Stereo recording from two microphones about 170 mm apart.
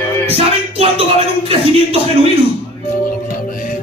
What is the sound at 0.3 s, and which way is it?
Music, 35° right (ahead or behind).